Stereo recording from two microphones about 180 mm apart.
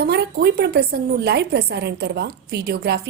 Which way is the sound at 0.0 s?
65° right (ahead or behind).